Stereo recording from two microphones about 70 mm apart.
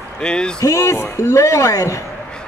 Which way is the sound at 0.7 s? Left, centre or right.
Left.